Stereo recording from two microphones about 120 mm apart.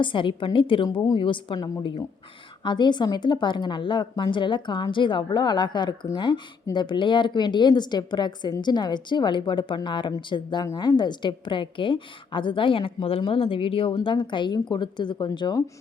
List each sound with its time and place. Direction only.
0.0 s a woman's voice: 45° left (ahead or behind)